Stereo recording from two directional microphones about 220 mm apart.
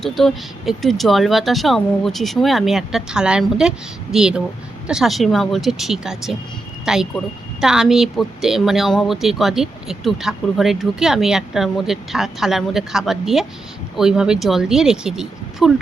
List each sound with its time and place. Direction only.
0.0 s speech: centre (ahead or behind)